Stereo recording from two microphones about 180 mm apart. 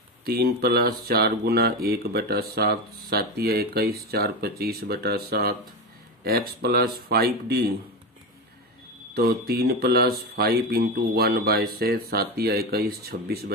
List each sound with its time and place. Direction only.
0.2 s speech: 60° right (ahead or behind)
9.1 s speech: 60° right (ahead or behind)